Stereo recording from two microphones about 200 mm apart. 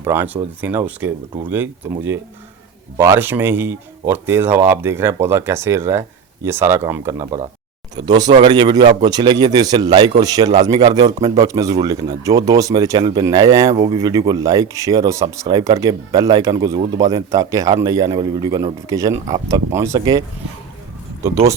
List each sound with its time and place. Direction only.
0.0 s a man's voice: 10° right (ahead or behind)